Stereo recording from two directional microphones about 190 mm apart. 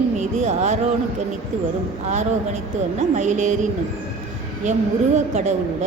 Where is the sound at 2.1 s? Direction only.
35° right (ahead or behind).